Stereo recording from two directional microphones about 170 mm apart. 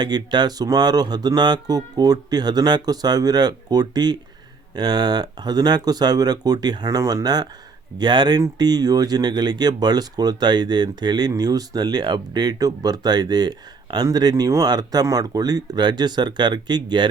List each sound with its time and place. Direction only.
0.0 s speech: 25° right (ahead or behind)